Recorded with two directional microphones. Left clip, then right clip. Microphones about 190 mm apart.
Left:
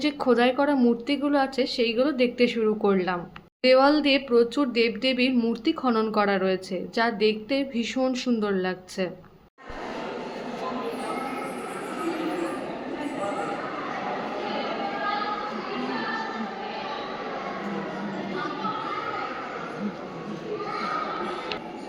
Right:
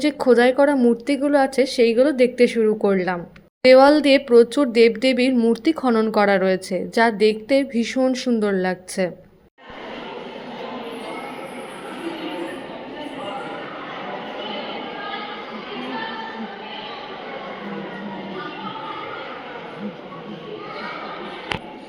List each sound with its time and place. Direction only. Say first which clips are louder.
0.0 s a woman's voice: right 6 dB; 25° right (ahead or behind)